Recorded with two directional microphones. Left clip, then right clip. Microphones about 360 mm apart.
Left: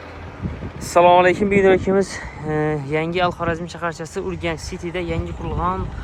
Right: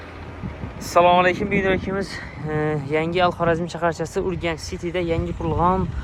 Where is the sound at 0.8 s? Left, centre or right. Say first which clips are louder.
Left 3 dB; centre.